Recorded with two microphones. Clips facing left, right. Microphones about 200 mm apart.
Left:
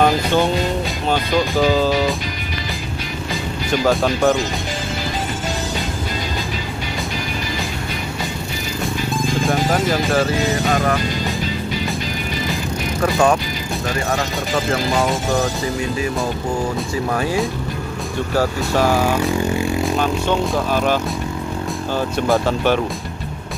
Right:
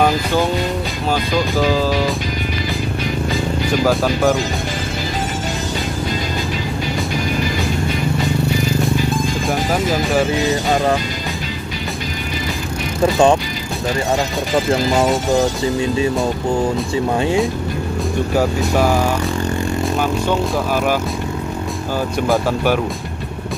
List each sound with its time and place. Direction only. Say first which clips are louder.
3.8 s speech: even; centre (ahead or behind)
9.5 s speech: even; centre (ahead or behind)
13.0 s speech: right 3 dB; 25° right (ahead or behind)
17.2 s speech: right 4 dB; 25° right (ahead or behind)
18.9 s speech: left 1 dB; 5° left (ahead or behind)